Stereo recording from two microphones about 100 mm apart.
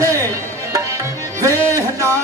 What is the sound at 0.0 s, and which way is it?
Music, 35° right (ahead or behind).